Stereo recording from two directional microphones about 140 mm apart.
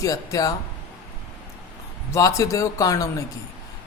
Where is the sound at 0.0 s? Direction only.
25° left (ahead or behind).